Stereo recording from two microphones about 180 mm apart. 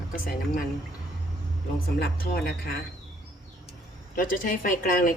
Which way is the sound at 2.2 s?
60° left (ahead or behind).